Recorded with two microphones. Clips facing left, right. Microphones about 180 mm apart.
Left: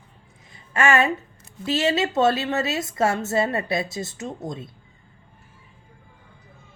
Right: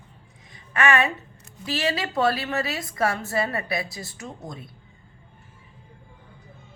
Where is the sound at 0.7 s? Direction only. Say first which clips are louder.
Left 2 dB; 25° left (ahead or behind).